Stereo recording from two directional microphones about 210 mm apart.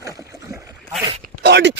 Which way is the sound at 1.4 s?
55° right (ahead or behind).